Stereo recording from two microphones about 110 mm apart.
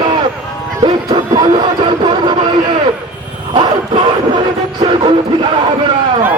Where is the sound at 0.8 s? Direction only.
45° right (ahead or behind).